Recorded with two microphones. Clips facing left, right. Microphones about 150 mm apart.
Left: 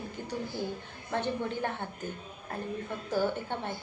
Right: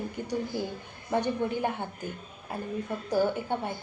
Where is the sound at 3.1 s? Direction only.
15° right (ahead or behind).